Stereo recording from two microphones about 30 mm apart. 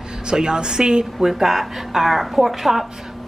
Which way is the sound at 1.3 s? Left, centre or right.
Centre.